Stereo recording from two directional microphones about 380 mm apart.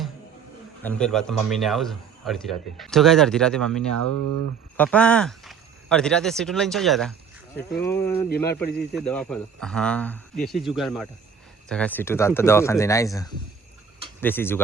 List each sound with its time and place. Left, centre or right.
0.8 s a man's voice: centre
4.0 s speech: right
4.8 s a man's voice: centre
8.7 s speech: left
9.0 s a man's voice: centre